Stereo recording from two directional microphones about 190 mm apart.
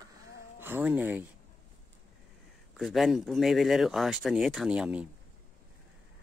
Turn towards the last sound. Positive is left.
turn(degrees=-5)  # may be behind; listen again after turning